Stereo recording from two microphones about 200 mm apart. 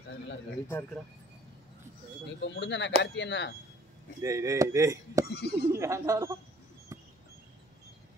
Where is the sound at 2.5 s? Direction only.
65° left (ahead or behind).